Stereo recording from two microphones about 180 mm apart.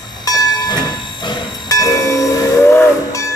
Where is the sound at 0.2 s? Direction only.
20° left (ahead or behind).